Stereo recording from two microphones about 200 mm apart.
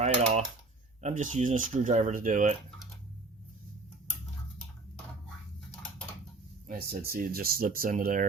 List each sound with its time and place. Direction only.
0.0 s cutlery: 35° right (ahead or behind)
1.0 s speech: 40° right (ahead or behind)
6.7 s speech: 50° right (ahead or behind)